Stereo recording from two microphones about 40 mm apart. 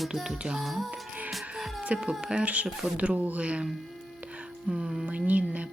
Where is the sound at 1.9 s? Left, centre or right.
Right.